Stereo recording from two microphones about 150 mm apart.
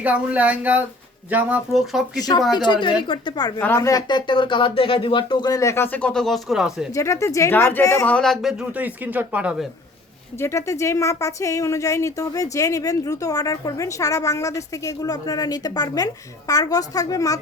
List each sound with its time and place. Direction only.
0.0 s speech: 10° right (ahead or behind)
2.5 s speech: 30° left (ahead or behind); by 6.9 s 5° right (ahead or behind)
6.9 s speech: 20° left (ahead or behind)
8.0 s speech: 5° left (ahead or behind)
10.4 s speech: 20° left (ahead or behind)